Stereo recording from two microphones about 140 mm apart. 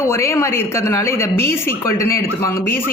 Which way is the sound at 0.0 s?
20° left (ahead or behind).